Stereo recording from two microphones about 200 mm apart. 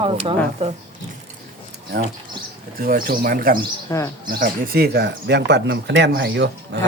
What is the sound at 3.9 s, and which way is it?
Speech, 15° left (ahead or behind).